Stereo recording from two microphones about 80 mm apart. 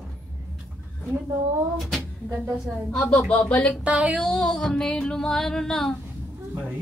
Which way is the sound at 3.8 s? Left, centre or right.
Centre.